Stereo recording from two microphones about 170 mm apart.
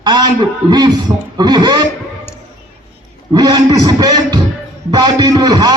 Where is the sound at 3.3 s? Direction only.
25° right (ahead or behind).